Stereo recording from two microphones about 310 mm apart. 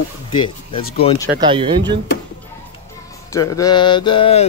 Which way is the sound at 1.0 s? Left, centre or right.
Centre.